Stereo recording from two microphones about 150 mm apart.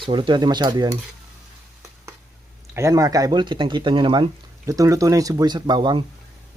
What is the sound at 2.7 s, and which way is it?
Speech, 20° right (ahead or behind).